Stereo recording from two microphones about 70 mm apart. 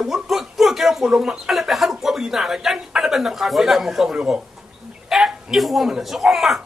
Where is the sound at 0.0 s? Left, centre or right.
Centre.